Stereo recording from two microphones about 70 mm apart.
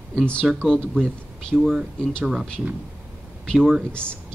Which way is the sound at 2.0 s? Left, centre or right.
Centre.